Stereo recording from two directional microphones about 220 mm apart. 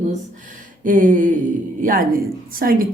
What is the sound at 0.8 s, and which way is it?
A woman's voice, 40° right (ahead or behind).